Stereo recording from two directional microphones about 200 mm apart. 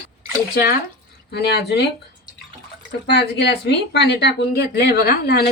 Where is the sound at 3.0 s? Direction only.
55° left (ahead or behind).